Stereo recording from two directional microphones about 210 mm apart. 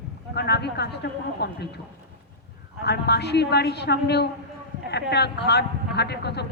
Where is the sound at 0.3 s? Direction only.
50° left (ahead or behind).